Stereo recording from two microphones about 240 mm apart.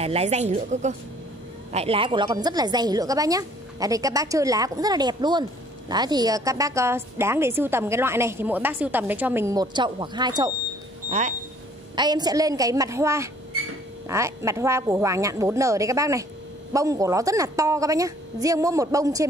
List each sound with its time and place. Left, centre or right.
0.0 s a woman's voice: right
11.1 s speech: right
11.9 s a woman's voice: centre